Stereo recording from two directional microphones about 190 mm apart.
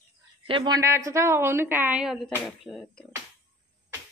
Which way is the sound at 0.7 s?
15° right (ahead or behind).